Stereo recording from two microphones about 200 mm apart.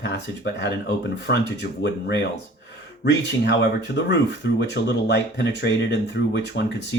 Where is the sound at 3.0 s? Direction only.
55° left (ahead or behind).